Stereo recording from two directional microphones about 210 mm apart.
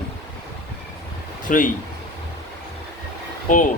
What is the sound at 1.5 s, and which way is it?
Speech, 40° left (ahead or behind).